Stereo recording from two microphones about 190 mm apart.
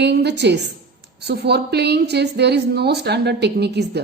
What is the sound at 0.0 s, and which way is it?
A woman's voice, 60° right (ahead or behind).